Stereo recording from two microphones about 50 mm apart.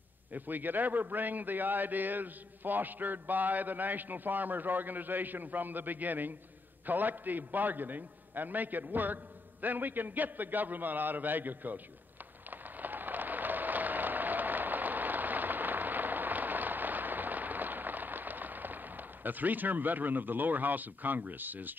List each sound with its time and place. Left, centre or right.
0.3 s a man's voice: right
12.4 s applause: right